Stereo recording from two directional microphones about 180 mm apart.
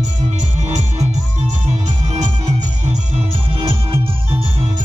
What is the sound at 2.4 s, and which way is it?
Music, 40° right (ahead or behind).